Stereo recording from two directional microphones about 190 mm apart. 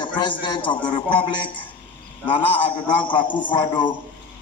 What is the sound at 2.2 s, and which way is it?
A man's voice, 25° left (ahead or behind).